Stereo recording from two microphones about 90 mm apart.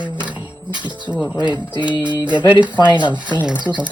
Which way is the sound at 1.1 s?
10° right (ahead or behind).